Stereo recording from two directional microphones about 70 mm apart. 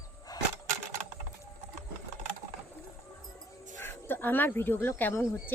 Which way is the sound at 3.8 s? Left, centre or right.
Left.